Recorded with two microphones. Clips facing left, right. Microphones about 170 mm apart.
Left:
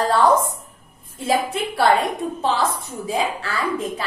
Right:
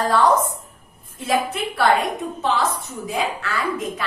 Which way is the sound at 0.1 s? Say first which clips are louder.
Even; 30° left (ahead or behind).